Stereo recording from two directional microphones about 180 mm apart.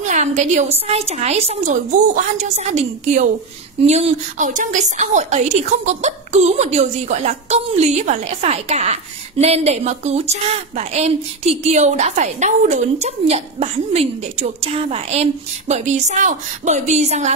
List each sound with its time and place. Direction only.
0.0 s a woman's voice: 40° right (ahead or behind)